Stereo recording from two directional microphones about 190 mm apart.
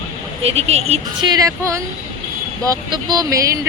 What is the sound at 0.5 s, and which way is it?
Speech, 35° right (ahead or behind).